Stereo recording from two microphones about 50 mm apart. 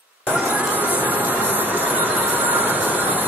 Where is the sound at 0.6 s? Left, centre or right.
Right.